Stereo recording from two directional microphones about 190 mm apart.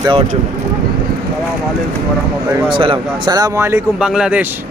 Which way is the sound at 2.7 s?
30° right (ahead or behind).